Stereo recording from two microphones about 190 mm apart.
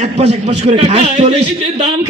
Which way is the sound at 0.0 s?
35° right (ahead or behind).